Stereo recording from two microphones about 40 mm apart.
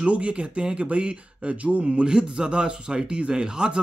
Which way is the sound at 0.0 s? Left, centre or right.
Right.